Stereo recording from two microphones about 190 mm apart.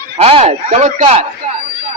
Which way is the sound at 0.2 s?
30° right (ahead or behind).